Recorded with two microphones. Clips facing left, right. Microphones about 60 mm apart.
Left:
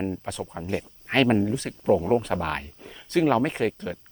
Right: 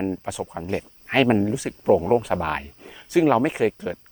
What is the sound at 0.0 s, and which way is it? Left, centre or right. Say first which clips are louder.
Speech: right 3 dB; centre.